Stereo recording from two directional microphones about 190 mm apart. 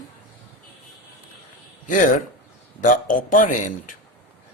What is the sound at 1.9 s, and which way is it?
Speech, 45° left (ahead or behind).